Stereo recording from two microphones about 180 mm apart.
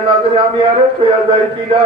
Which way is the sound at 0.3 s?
30° right (ahead or behind).